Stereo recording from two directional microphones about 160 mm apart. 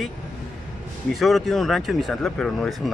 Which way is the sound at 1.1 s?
Centre (ahead or behind).